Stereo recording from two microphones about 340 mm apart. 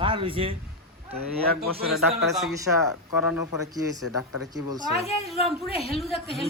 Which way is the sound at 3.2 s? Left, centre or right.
Left.